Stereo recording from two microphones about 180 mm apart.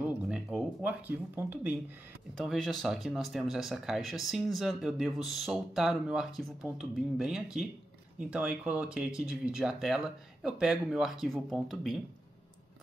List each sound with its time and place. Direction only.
0.0 s speech: 5° right (ahead or behind)